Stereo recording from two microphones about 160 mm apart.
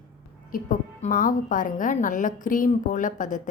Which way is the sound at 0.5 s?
60° left (ahead or behind).